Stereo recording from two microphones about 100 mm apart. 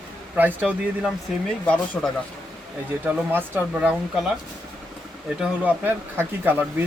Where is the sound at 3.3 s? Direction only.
20° right (ahead or behind).